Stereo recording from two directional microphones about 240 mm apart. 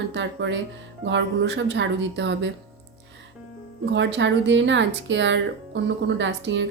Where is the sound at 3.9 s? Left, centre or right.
Right.